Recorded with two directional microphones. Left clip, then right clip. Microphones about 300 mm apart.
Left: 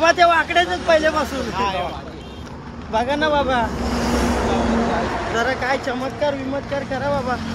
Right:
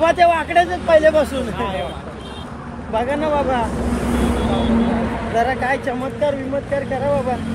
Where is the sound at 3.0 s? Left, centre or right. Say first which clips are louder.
Even; centre.